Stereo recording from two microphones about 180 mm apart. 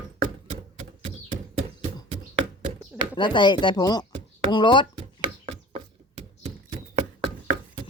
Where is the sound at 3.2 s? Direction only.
25° left (ahead or behind).